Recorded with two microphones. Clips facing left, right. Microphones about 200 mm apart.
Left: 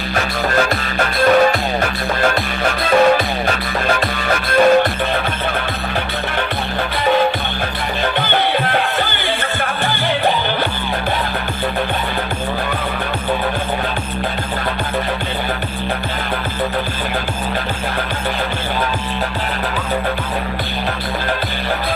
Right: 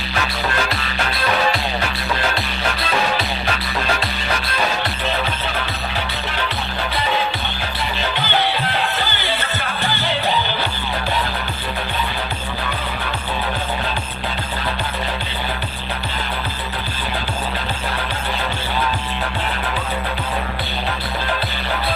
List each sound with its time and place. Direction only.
0.5 s music: 45° left (ahead or behind)
8.0 s music: 50° left (ahead or behind)